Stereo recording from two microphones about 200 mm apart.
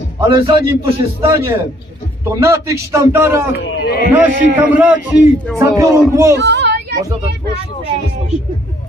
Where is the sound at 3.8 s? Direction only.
50° left (ahead or behind).